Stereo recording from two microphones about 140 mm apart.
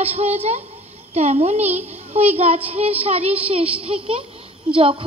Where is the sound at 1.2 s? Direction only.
50° right (ahead or behind).